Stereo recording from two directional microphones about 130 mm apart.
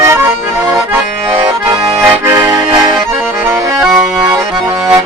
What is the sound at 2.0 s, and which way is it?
Accordion, 20° right (ahead or behind).